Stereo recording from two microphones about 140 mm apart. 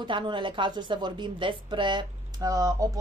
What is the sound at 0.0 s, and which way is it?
Speech, 35° right (ahead or behind).